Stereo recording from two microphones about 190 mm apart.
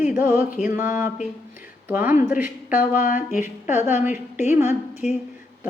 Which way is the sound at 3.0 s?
40° left (ahead or behind).